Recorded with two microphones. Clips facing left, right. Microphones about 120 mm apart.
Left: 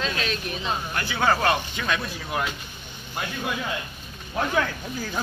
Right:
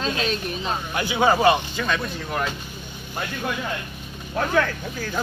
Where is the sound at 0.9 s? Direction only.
15° right (ahead or behind).